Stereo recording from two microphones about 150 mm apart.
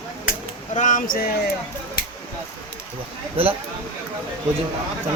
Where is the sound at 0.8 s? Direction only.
60° left (ahead or behind).